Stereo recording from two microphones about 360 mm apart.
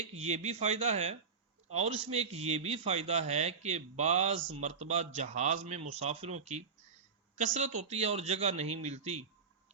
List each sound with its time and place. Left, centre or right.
0.0 s a man's voice: centre